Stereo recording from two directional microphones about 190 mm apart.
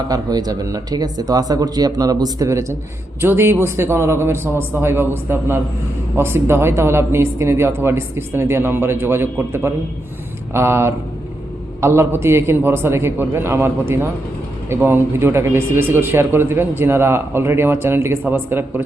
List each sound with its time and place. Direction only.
0.1 s a man's voice: 20° right (ahead or behind)